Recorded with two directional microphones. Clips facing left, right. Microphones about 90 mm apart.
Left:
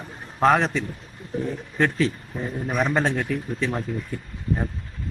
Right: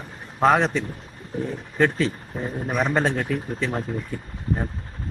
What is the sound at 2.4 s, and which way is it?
Speech, 35° right (ahead or behind).